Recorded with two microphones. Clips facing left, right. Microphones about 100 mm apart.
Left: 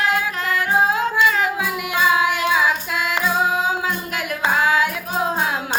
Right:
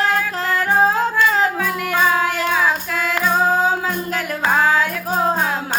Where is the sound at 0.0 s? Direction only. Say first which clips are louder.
Right 1 dB; 35° right (ahead or behind).